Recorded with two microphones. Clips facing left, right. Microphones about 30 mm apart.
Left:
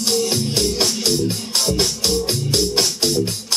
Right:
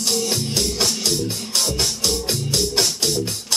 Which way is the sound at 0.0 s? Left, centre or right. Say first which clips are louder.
Left 3 dB; centre.